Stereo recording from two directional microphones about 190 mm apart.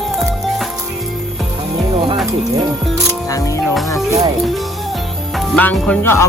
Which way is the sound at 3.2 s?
15° left (ahead or behind).